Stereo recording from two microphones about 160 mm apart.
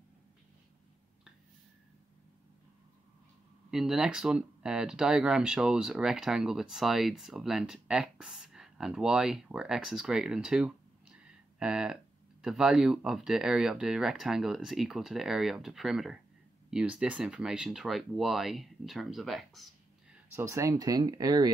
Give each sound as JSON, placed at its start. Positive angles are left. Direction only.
{"t": 3.7, "sound": "speech", "side_deg": -5}
{"t": 20.3, "sound": "speech", "side_deg": -20}